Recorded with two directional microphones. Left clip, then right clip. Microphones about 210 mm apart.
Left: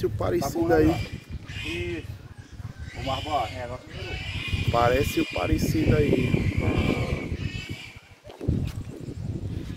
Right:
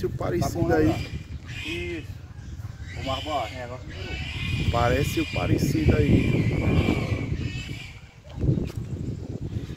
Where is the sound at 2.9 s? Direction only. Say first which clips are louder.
Left 1 dB; 30° right (ahead or behind).